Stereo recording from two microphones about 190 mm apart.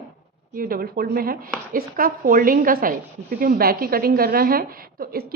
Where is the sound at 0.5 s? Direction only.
50° right (ahead or behind).